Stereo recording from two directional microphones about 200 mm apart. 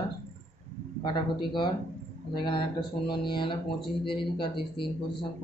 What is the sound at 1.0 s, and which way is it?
Speech, 20° left (ahead or behind).